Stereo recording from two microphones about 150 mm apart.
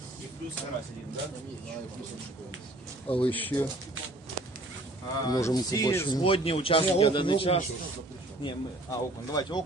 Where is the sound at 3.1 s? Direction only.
35° left (ahead or behind).